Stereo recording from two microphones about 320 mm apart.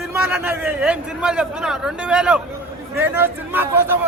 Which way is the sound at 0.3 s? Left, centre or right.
Centre.